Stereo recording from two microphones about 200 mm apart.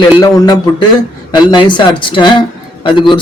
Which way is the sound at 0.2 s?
20° left (ahead or behind).